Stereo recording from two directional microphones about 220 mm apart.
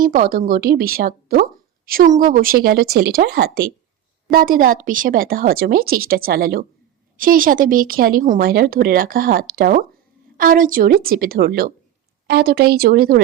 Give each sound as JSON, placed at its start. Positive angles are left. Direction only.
{"t": 0.0, "sound": "speech", "side_deg": -40}